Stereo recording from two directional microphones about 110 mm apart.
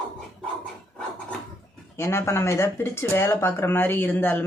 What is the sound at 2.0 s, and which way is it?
Speech, 25° left (ahead or behind).